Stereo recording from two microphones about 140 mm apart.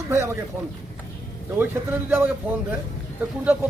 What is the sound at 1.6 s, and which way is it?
Speech, 15° right (ahead or behind).